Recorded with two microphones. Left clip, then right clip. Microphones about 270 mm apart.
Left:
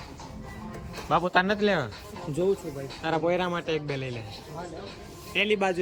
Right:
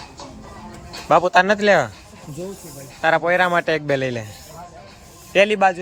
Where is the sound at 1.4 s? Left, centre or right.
Centre.